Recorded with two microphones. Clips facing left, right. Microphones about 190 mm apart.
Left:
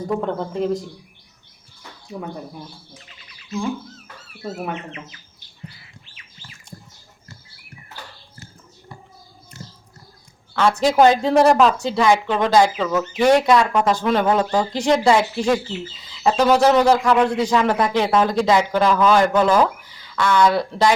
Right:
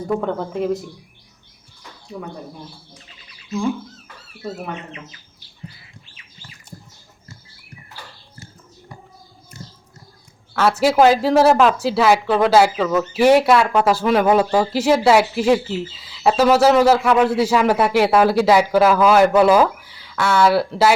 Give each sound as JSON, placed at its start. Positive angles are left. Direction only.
{"t": 0.2, "sound": "speech", "side_deg": 0}
{"t": 10.5, "sound": "speech", "side_deg": -5}
{"t": 16.0, "sound": "bird", "side_deg": -5}
{"t": 16.4, "sound": "a man's voice", "side_deg": -5}